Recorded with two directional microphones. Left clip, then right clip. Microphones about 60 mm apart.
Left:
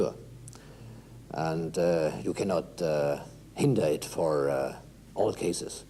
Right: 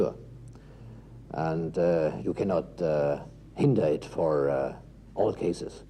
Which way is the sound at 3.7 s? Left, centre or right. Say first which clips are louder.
Right 1 dB; centre.